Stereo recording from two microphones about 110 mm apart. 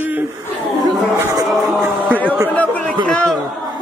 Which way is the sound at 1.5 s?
5° right (ahead or behind).